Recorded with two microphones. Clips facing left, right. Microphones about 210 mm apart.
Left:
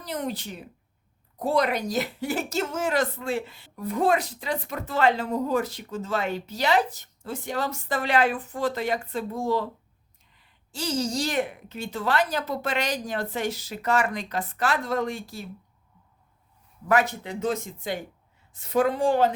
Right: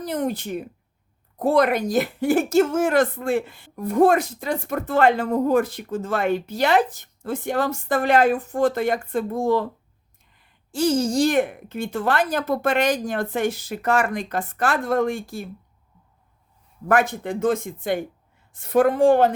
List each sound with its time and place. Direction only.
0.0 s a woman's voice: 50° right (ahead or behind)
16.9 s a woman's voice: 50° right (ahead or behind)